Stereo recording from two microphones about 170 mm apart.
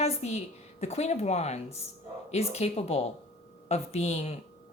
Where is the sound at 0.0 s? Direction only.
40° left (ahead or behind).